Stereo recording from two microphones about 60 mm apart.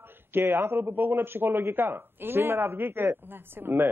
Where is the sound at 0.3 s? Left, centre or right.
Right.